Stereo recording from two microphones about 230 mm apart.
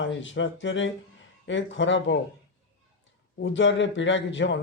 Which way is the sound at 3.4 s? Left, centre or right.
Left.